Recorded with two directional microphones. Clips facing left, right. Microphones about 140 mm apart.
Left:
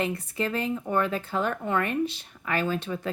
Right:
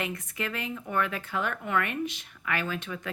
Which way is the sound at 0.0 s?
35° left (ahead or behind).